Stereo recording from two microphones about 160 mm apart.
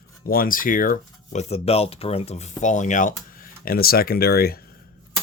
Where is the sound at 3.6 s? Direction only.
70° left (ahead or behind).